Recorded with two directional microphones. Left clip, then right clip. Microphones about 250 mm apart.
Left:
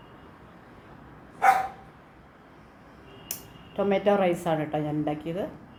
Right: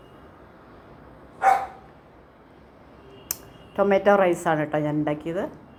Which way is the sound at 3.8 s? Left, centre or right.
Centre.